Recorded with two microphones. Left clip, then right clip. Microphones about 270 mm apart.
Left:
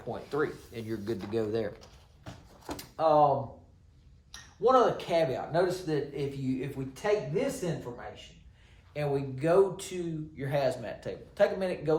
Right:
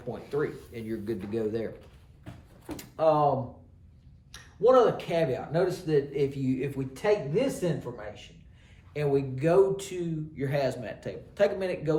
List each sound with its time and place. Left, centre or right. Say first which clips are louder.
0.1 s speech: right 1 dB; centre
2.7 s speech: even; centre
4.3 s speech: right 3 dB; centre
8.9 s speech: right 4 dB; centre